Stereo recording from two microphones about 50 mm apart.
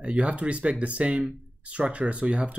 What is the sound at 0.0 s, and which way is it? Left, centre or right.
Speech, right.